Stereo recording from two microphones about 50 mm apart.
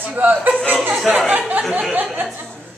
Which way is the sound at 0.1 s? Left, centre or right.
Right.